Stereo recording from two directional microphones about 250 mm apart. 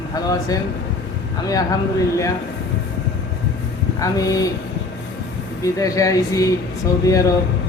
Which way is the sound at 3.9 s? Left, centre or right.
Centre.